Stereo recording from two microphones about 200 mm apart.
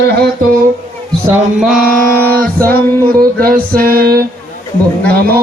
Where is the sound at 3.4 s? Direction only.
45° right (ahead or behind).